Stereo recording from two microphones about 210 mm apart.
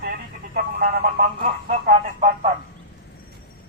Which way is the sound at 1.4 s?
35° right (ahead or behind).